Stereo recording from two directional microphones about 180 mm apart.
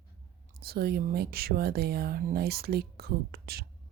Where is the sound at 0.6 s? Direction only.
60° right (ahead or behind).